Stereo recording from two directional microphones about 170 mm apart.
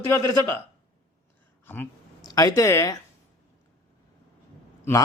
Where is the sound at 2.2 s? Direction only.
20° left (ahead or behind).